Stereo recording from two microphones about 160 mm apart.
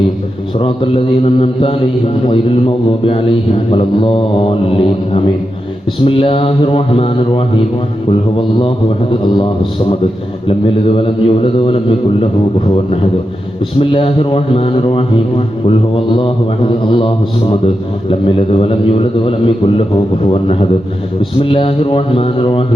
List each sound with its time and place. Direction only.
0.6 s a man's voice: 35° left (ahead or behind)
10.4 s a man's voice: 35° left (ahead or behind)
16.9 s a man's voice: 35° left (ahead or behind)